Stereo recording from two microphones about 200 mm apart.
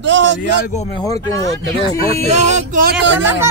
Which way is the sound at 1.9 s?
30° right (ahead or behind).